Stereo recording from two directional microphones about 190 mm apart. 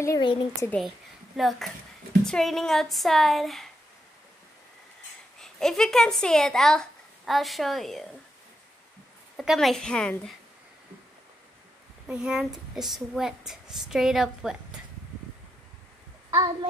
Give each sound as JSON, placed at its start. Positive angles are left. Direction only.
{"t": 0.0, "sound": "a woman's voice", "side_deg": 20}
{"t": 0.7, "sound": "a woman's voice", "side_deg": 0}
{"t": 5.4, "sound": "speech", "side_deg": 5}
{"t": 9.4, "sound": "a woman's voice", "side_deg": 0}
{"t": 12.1, "sound": "a woman's voice", "side_deg": -5}
{"t": 16.3, "sound": "a sound", "side_deg": -15}